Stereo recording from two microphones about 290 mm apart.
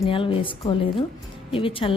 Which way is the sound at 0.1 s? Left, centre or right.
Centre.